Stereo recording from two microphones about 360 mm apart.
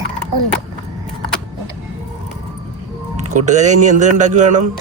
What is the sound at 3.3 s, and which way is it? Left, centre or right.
Speech, centre.